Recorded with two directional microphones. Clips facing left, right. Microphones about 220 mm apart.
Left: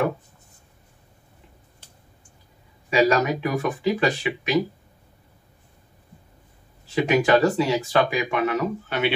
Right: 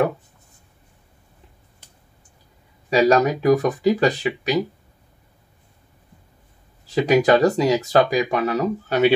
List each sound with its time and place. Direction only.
2.9 s speech: 40° right (ahead or behind)
7.1 s speech: 40° right (ahead or behind)